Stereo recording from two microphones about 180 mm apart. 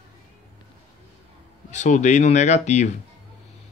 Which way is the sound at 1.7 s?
40° left (ahead or behind).